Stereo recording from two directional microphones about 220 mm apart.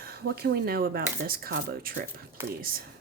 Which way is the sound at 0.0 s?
45° right (ahead or behind).